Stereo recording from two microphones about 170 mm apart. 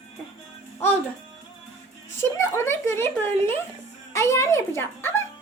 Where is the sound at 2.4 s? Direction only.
15° left (ahead or behind).